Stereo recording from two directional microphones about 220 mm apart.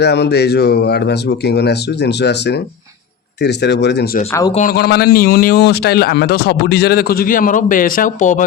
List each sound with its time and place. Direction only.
0.0 s speech: 50° left (ahead or behind)
4.3 s speech: 15° left (ahead or behind)
4.5 s speech: 40° left (ahead or behind)